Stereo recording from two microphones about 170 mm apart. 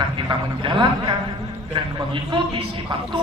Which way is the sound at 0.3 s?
25° right (ahead or behind).